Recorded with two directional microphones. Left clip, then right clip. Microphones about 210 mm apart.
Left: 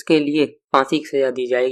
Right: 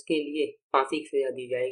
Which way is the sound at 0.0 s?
35° left (ahead or behind).